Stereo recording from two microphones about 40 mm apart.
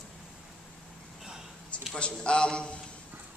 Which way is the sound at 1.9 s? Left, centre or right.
Left.